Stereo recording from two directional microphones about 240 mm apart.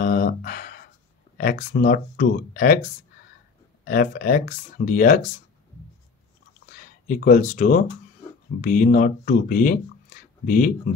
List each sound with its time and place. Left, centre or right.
0.0 s a sound: left
1.4 s speech: left
6.7 s speech: left